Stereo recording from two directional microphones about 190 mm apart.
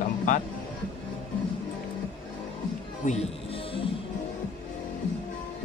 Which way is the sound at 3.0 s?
35° left (ahead or behind).